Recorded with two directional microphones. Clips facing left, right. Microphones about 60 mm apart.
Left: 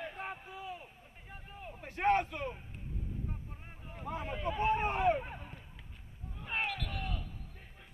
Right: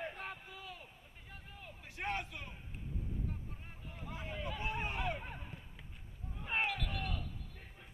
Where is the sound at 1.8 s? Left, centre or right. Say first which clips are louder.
Left 11 dB; left.